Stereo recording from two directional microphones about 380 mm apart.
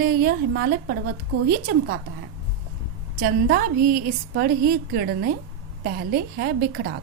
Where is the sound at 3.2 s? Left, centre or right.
Right.